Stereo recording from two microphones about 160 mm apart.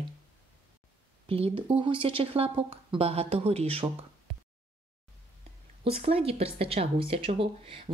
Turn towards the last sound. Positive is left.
turn(degrees=-35)  # may be behind; listen again after turning